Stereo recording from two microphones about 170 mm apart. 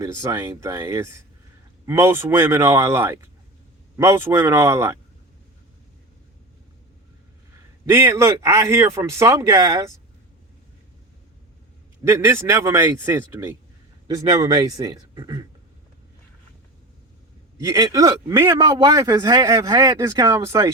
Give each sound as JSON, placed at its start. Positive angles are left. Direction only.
{"t": 0.0, "sound": "speech", "side_deg": -15}
{"t": 7.9, "sound": "speech", "side_deg": -15}
{"t": 12.0, "sound": "a man's voice", "side_deg": -15}
{"t": 17.6, "sound": "a man's voice", "side_deg": -20}